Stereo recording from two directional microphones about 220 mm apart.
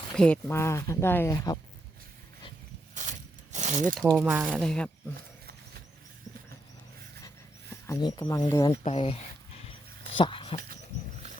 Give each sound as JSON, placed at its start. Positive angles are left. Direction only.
{"t": 0.2, "sound": "speech", "side_deg": 5}
{"t": 2.9, "sound": "a sound", "side_deg": -35}
{"t": 4.0, "sound": "speech", "side_deg": -5}
{"t": 7.9, "sound": "speech", "side_deg": 15}
{"t": 8.8, "sound": "speech", "side_deg": 25}